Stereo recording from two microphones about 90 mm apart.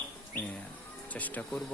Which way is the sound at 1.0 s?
15° left (ahead or behind).